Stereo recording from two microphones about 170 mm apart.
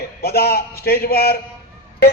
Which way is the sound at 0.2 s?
70° left (ahead or behind).